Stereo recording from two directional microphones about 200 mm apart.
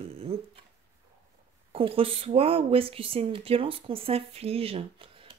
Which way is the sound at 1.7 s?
25° right (ahead or behind).